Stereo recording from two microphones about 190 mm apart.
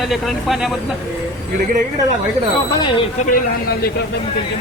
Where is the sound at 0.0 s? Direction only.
Centre (ahead or behind).